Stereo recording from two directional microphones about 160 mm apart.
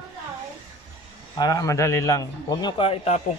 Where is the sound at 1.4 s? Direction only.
20° left (ahead or behind).